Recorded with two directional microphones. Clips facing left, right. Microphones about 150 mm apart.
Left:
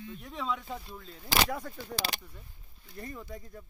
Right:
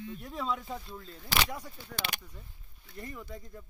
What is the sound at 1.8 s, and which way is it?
Speech, 35° left (ahead or behind).